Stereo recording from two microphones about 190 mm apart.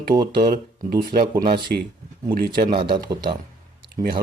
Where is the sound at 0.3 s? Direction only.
50° right (ahead or behind).